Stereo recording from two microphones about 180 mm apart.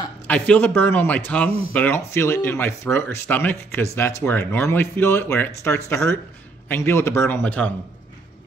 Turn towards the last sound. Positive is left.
turn(degrees=10)  # may be behind; listen again after turning